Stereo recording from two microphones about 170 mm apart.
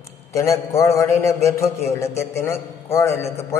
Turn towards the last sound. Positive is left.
turn(degrees=15)  # may be behind; listen again after turning